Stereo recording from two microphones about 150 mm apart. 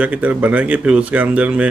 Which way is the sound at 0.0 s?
10° right (ahead or behind).